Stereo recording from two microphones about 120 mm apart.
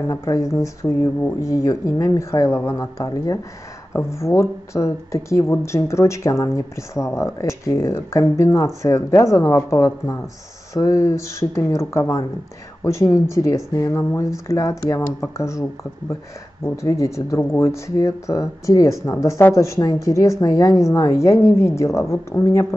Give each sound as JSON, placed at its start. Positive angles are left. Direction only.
{"t": 0.1, "sound": "speech", "side_deg": 25}
{"t": 16.6, "sound": "speech", "side_deg": 25}